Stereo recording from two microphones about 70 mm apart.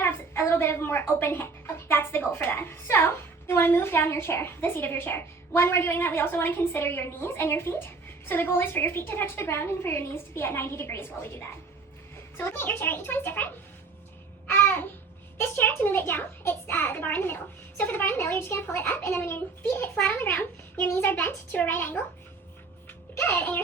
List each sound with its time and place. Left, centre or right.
0.0 s a woman's voice: left
14.4 s babbling: left
15.4 s a woman's voice: left
22.9 s a sound: left